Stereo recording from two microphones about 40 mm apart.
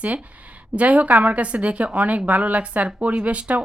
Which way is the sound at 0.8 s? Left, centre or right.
Right.